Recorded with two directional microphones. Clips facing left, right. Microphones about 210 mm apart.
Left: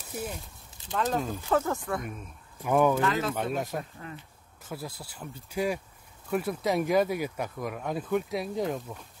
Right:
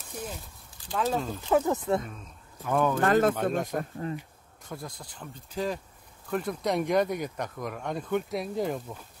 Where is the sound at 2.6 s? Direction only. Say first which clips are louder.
Left 3 dB; 15° left (ahead or behind).